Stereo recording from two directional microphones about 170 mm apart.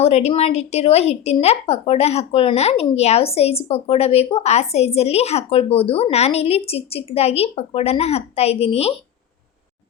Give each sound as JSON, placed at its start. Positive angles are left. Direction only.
{"t": 0.0, "sound": "a woman's voice", "side_deg": 40}